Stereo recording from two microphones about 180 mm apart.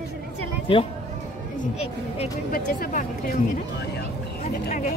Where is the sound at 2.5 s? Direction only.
45° left (ahead or behind).